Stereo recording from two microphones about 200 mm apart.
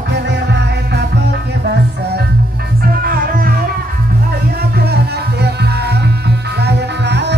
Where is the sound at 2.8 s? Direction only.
45° right (ahead or behind).